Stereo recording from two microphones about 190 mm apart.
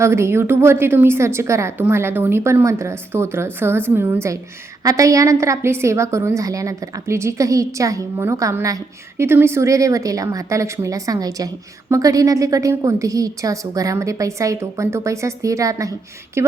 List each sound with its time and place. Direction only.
0.0 s a woman's voice: 15° right (ahead or behind)